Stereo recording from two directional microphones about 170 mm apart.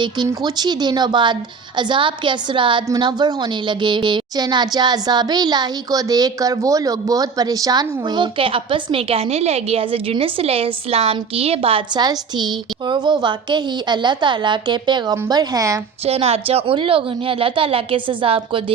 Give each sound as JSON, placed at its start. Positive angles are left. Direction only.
{"t": 0.0, "sound": "a woman's voice", "side_deg": -25}
{"t": 16.0, "sound": "a woman's voice", "side_deg": -35}